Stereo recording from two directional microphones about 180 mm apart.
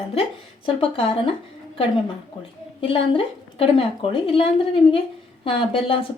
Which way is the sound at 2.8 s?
30° left (ahead or behind).